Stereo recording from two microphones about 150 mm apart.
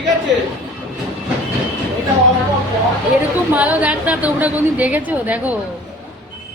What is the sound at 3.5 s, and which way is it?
A woman's voice, 10° right (ahead or behind).